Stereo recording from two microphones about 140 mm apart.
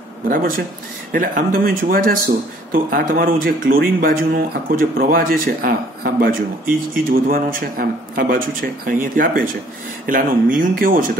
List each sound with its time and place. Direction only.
0.3 s speech: 90° right
10.0 s speech: 75° right (ahead or behind)